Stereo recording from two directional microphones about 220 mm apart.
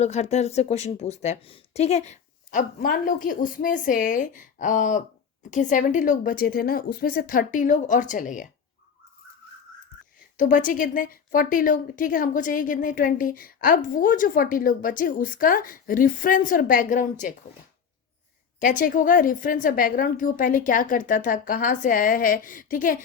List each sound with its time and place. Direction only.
0.0 s speech: 30° left (ahead or behind)
10.3 s speech: 35° left (ahead or behind)
18.6 s speech: 35° left (ahead or behind)